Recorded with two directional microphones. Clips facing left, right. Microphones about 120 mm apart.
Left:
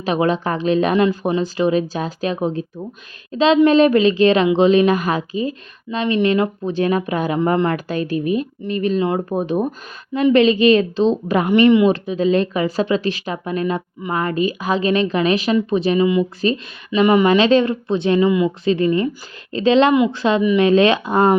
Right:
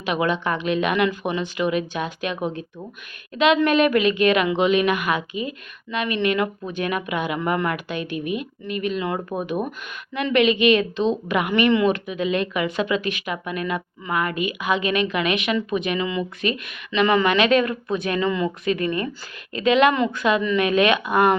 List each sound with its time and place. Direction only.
0.0 s a woman's voice: 35° left (ahead or behind)
11.9 s a woman's voice: 35° left (ahead or behind)
18.3 s speech: 15° left (ahead or behind)
18.6 s a woman's voice: 30° left (ahead or behind)